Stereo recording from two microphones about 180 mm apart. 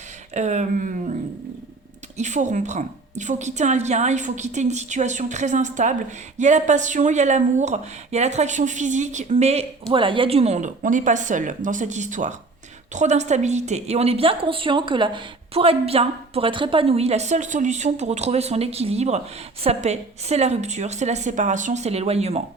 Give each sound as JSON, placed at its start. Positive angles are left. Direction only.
{"t": 0.3, "sound": "speech", "side_deg": -40}
{"t": 2.1, "sound": "a woman's voice", "side_deg": -40}